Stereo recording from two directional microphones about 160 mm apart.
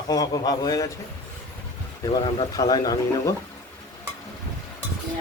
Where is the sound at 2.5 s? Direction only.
25° left (ahead or behind).